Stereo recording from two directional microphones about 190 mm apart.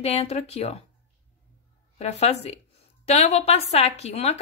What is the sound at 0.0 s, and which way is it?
Speech, 35° left (ahead or behind).